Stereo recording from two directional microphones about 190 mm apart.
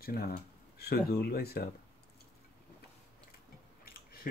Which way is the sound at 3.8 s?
50° left (ahead or behind).